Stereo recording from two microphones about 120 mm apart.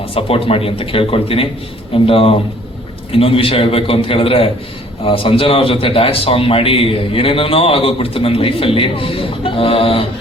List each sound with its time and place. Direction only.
0.0 s a man's voice: 50° left (ahead or behind)